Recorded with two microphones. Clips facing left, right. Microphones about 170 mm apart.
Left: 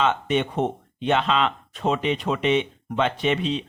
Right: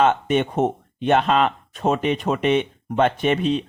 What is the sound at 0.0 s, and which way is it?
Speech, 50° right (ahead or behind).